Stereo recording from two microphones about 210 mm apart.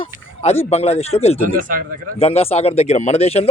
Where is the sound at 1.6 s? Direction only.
40° right (ahead or behind).